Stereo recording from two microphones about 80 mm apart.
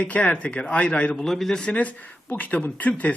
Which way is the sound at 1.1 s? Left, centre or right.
Centre.